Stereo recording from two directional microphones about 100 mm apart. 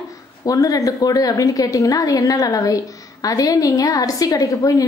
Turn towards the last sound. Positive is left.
turn(degrees=35)  # may be behind; listen again after turning